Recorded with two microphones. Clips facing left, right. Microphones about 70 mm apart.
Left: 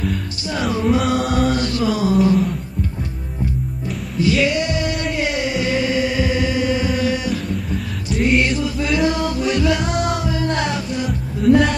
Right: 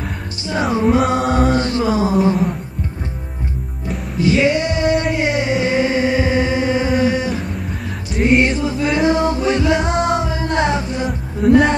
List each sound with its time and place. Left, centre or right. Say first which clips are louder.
0.0 s music: left 3 dB; right
4.2 s male singing: right 2 dB; right
5.1 s chant: right 3 dB; right
8.2 s music: right 3 dB; right